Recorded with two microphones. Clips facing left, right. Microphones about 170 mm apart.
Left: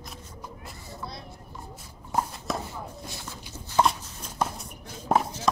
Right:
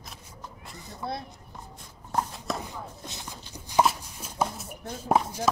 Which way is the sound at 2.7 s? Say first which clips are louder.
Left 1 dB; 15° right (ahead or behind).